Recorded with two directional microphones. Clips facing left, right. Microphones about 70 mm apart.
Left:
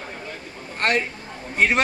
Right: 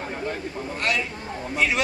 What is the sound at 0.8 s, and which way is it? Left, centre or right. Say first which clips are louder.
Speech: left 5 dB; left.